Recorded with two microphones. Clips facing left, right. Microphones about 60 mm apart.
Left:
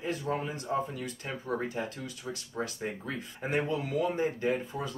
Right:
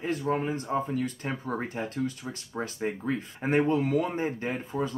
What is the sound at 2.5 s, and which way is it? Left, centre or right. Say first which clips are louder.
Speech: right 4 dB; right.